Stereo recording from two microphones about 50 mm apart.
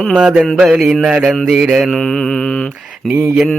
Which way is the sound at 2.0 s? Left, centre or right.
Centre.